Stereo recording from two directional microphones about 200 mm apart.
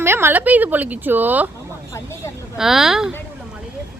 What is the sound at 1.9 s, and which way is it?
Speech, 15° left (ahead or behind).